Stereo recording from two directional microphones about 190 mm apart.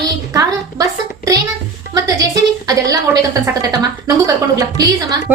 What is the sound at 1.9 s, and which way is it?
Music, 20° right (ahead or behind).